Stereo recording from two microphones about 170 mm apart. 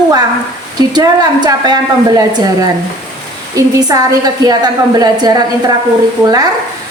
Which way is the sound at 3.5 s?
20° right (ahead or behind).